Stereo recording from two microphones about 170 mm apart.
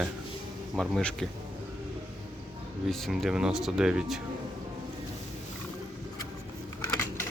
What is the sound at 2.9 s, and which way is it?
Speech, centre (ahead or behind).